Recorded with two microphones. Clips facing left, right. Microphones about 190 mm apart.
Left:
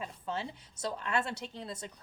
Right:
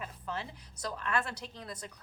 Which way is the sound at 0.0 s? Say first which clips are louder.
Left 2 dB; 25° left (ahead or behind).